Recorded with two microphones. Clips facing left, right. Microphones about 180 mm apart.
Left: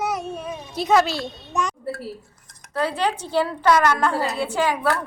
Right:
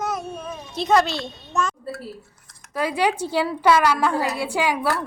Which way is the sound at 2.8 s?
10° right (ahead or behind).